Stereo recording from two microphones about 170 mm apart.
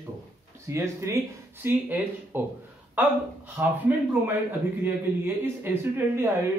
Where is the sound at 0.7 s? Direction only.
15° right (ahead or behind).